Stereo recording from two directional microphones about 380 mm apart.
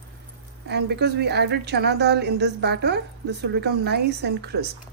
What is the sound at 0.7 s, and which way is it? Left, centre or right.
A woman's voice, right.